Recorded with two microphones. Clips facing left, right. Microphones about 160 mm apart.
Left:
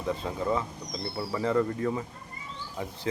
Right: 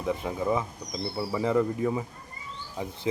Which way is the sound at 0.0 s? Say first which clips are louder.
Right 2 dB; 15° right (ahead or behind).